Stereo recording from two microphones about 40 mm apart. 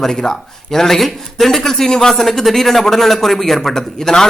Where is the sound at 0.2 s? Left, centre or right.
Centre.